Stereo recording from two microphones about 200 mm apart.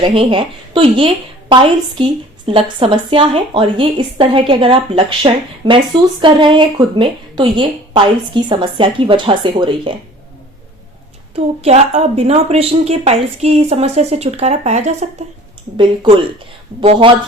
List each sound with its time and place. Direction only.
0.0 s a woman's voice: 25° right (ahead or behind)
11.3 s speech: 30° right (ahead or behind)